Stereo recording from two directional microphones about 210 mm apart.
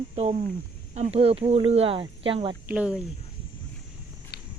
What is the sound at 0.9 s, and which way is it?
Speech, 30° right (ahead or behind).